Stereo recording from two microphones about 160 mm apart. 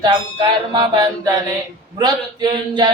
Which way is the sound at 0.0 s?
30° right (ahead or behind).